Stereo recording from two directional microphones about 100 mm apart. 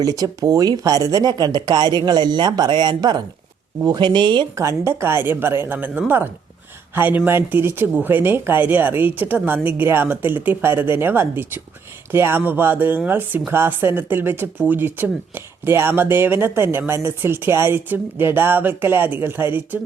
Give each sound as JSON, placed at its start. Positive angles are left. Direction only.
{"t": 0.0, "sound": "speech", "side_deg": -40}
{"t": 4.5, "sound": "speech", "side_deg": -30}